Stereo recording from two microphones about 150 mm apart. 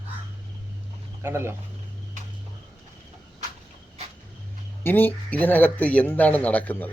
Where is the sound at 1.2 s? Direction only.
15° right (ahead or behind).